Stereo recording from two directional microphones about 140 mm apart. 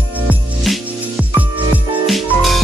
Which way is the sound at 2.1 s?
Centre (ahead or behind).